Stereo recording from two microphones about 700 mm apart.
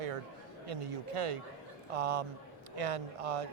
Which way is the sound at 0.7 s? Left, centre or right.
Right.